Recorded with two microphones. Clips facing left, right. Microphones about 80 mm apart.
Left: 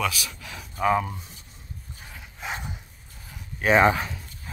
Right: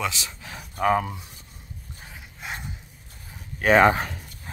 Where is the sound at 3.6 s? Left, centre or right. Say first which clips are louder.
Right 2 dB; right.